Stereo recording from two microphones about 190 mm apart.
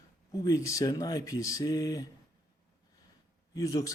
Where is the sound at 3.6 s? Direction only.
20° left (ahead or behind).